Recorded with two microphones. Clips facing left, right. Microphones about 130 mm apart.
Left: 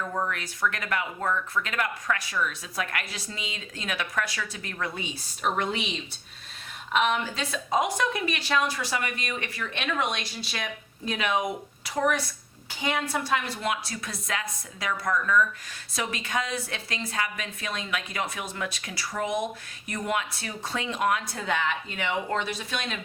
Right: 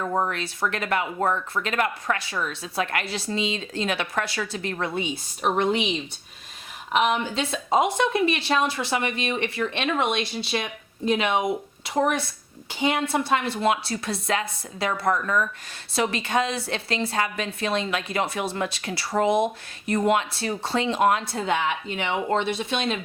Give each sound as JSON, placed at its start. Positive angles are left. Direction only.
{"t": 0.0, "sound": "speech", "side_deg": -35}
{"t": 7.1, "sound": "speech", "side_deg": -25}